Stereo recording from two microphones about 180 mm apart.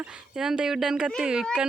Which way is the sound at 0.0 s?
5° right (ahead or behind).